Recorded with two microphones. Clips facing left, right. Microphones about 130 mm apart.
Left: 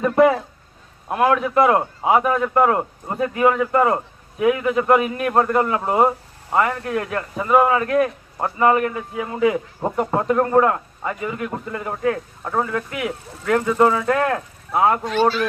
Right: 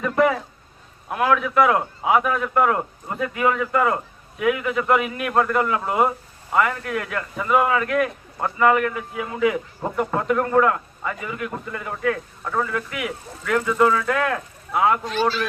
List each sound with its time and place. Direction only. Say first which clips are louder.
0.0 s a man's voice: left 4 dB; 30° left (ahead or behind)